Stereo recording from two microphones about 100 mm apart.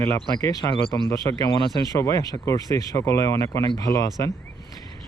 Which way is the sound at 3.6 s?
45° left (ahead or behind).